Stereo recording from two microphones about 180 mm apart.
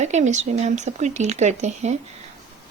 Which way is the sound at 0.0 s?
40° right (ahead or behind).